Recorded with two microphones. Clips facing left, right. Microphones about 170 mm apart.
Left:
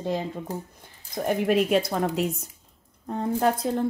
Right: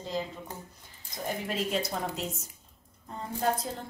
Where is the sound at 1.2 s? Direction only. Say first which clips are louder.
Left 10 dB; 65° left (ahead or behind).